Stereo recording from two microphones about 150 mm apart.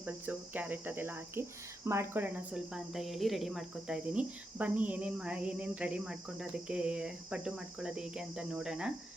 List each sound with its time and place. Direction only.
0.0 s speech: 10° right (ahead or behind)